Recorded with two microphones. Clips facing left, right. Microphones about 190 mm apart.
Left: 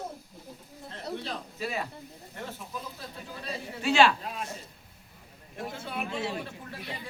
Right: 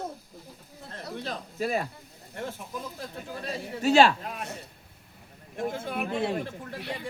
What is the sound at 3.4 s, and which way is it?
Speech, 40° right (ahead or behind).